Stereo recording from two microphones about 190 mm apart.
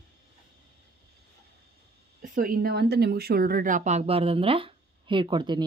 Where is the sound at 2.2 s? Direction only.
45° right (ahead or behind).